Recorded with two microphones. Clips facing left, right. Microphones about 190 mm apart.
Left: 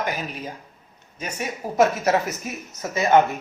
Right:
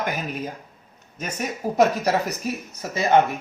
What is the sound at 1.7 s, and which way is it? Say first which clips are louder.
Speech: left 1 dB; 35° right (ahead or behind).